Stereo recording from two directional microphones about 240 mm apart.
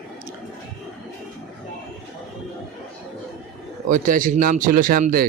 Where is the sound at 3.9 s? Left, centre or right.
Right.